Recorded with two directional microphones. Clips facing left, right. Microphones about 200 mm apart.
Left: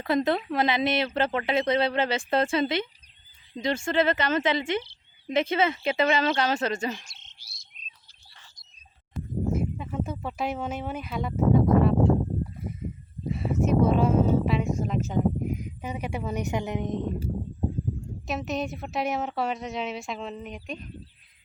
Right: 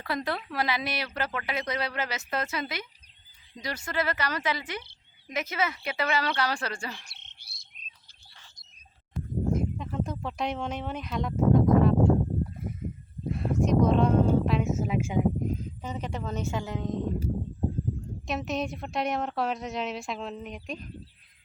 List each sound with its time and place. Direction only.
0.0 s speech: 20° left (ahead or behind)
7.0 s frog: 60° right (ahead or behind)
9.1 s speech: 5° left (ahead or behind)
13.2 s a sound: centre (ahead or behind)
15.4 s speech: 10° left (ahead or behind)
18.3 s a woman's voice: centre (ahead or behind)